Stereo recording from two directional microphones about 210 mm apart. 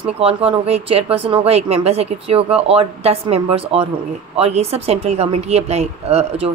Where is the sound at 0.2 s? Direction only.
25° right (ahead or behind).